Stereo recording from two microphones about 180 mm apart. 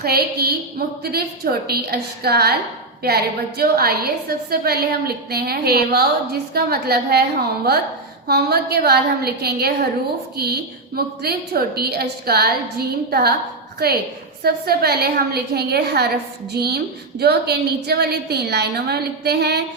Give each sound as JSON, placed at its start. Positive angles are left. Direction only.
{"t": 0.0, "sound": "a woman's voice", "side_deg": -60}
{"t": 14.4, "sound": "a woman's voice", "side_deg": -60}